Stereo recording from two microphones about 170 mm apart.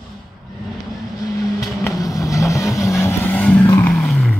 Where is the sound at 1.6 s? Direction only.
20° left (ahead or behind).